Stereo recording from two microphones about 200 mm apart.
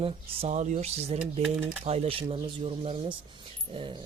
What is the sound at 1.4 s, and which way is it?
Speech, 5° right (ahead or behind).